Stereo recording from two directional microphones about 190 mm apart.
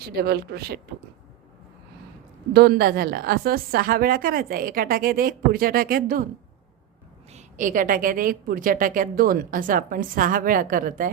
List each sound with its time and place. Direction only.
0.0 s speech: 55° right (ahead or behind)
2.5 s a woman's voice: 55° right (ahead or behind)
7.3 s a woman's voice: 40° right (ahead or behind)